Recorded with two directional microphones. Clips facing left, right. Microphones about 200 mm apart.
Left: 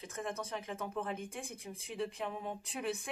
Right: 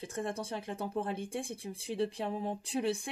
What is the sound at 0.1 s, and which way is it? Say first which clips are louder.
Speech: right 3 dB; 30° right (ahead or behind).